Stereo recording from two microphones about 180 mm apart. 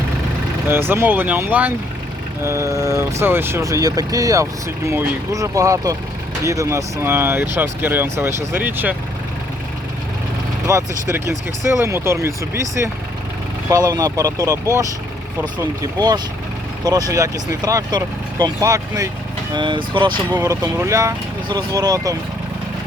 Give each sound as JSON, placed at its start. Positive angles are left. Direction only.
{"t": 0.7, "sound": "speech", "side_deg": -15}
{"t": 10.7, "sound": "speech", "side_deg": -15}
{"t": 13.7, "sound": "speech", "side_deg": -20}
{"t": 15.8, "sound": "speech", "side_deg": -25}